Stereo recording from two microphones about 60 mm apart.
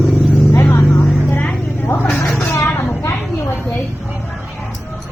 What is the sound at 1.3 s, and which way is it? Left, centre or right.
Vehicle, left.